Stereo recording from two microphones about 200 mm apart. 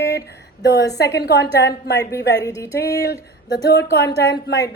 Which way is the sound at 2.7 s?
55° left (ahead or behind).